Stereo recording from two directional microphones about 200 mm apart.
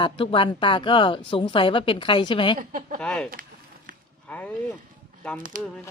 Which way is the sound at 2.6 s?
40° right (ahead or behind).